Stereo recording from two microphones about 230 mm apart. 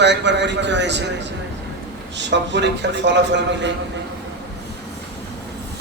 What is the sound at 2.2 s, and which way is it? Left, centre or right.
A man's voice, right.